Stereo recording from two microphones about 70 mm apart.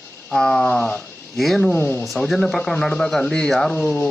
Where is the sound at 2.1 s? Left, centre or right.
Centre.